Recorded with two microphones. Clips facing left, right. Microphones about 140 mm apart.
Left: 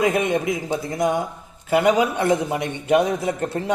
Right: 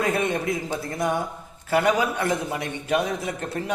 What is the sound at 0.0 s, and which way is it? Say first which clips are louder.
A man's voice: left 4 dB; 15° left (ahead or behind).